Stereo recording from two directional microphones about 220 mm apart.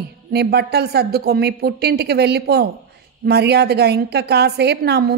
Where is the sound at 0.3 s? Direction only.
45° right (ahead or behind).